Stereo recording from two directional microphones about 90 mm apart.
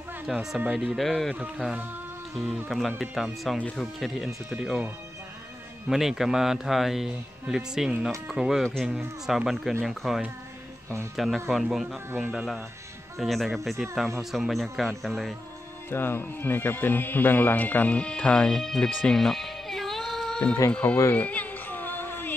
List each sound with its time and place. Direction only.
0.3 s speech: 5° right (ahead or behind)
3.0 s speech: centre (ahead or behind)
5.9 s speech: 5° right (ahead or behind)
15.9 s speech: 25° left (ahead or behind)
21.1 s music: 15° left (ahead or behind)